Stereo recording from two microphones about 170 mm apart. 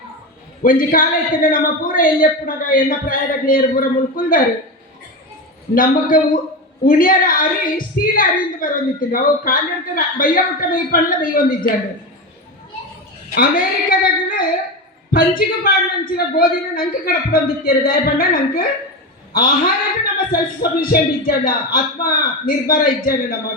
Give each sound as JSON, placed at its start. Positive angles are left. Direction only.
{"t": 0.6, "sound": "a woman's voice", "side_deg": 55}
{"t": 5.7, "sound": "a man's voice", "side_deg": 55}
{"t": 13.3, "sound": "a woman's voice", "side_deg": 60}